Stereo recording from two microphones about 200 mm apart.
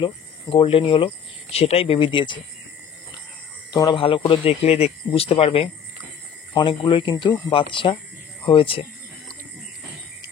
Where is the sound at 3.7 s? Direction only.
20° left (ahead or behind).